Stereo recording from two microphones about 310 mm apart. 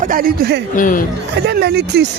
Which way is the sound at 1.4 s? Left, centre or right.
Right.